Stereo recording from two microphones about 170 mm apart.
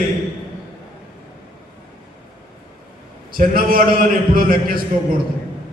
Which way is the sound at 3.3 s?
55° right (ahead or behind).